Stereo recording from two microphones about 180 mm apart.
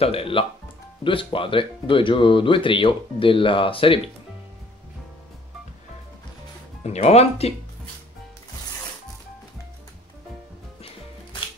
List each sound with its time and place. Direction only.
0.0 s speech: 30° left (ahead or behind)
6.8 s speech: 35° left (ahead or behind)